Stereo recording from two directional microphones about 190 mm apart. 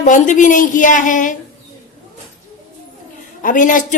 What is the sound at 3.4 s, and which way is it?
Speech, 45° left (ahead or behind).